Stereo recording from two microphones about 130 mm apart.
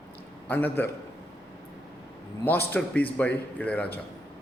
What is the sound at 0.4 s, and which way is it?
Speech, 15° left (ahead or behind).